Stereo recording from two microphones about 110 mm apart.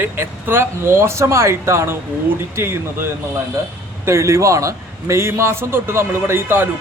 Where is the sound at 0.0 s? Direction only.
20° right (ahead or behind).